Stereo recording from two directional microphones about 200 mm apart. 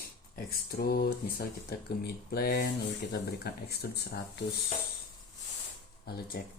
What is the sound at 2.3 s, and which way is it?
Mantra, 45° left (ahead or behind).